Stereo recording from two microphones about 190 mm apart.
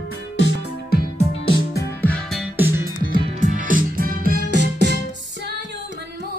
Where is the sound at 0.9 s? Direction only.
55° left (ahead or behind).